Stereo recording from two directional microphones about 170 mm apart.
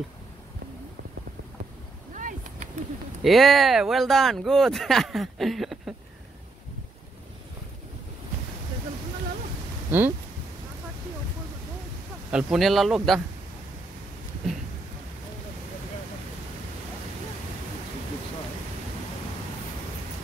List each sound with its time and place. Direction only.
2.1 s a sound: 50° right (ahead or behind)
3.3 s speech: centre (ahead or behind)
9.8 s speech: 10° right (ahead or behind)
12.3 s speech: 5° right (ahead or behind)